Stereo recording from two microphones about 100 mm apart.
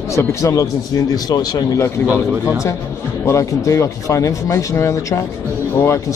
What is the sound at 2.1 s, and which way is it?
Speech, 10° right (ahead or behind).